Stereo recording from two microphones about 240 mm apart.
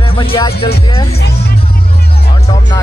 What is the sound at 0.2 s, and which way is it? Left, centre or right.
Music, left.